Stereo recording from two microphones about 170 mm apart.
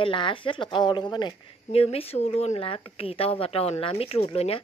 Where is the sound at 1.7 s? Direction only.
35° left (ahead or behind).